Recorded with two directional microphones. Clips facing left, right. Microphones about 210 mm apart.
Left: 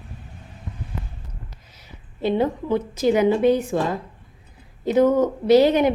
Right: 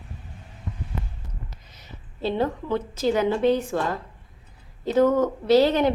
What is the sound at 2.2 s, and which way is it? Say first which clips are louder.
A woman's voice: left 4 dB; 15° left (ahead or behind).